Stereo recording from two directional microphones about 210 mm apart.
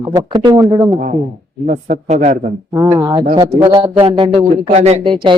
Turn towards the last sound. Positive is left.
turn(degrees=-25)  # may be behind; listen again after turning